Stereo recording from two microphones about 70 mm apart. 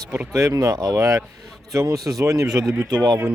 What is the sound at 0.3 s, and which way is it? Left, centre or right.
Speech, right.